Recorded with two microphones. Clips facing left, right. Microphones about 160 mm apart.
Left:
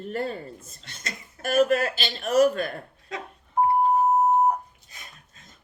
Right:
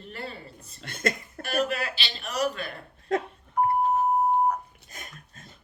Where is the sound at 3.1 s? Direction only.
50° right (ahead or behind).